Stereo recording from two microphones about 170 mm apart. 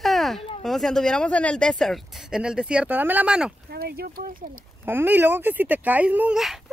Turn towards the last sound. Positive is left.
turn(degrees=-5)  # may be behind; listen again after turning